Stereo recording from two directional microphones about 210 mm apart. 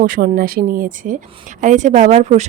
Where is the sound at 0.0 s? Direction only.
40° right (ahead or behind).